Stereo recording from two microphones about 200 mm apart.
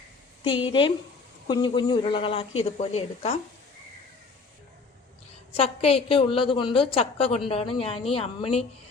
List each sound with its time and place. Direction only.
0.4 s a woman's voice: 25° left (ahead or behind)
5.5 s a woman's voice: 30° left (ahead or behind)